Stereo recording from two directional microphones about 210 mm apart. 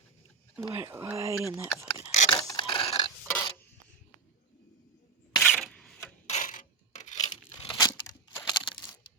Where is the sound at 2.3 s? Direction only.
15° left (ahead or behind).